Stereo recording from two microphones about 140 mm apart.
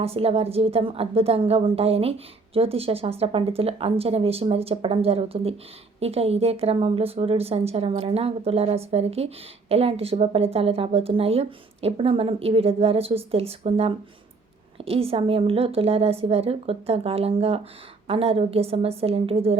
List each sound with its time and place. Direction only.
0.0 s a woman's voice: 45° right (ahead or behind)